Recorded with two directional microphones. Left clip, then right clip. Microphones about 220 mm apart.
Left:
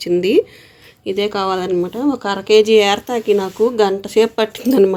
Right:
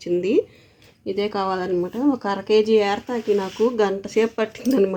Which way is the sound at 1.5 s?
5° right (ahead or behind).